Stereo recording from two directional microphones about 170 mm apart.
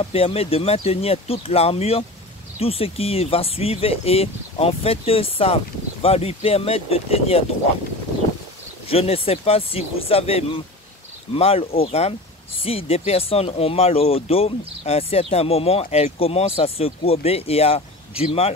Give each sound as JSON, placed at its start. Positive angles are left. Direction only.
{"t": 0.0, "sound": "speech", "side_deg": 35}
{"t": 8.8, "sound": "speech", "side_deg": 35}